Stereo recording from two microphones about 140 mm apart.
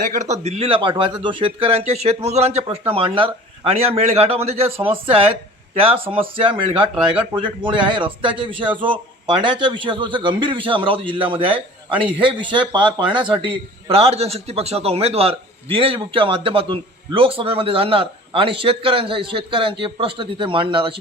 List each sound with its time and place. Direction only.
0.0 s a man's voice: 60° right (ahead or behind); by 20.9 s 35° right (ahead or behind)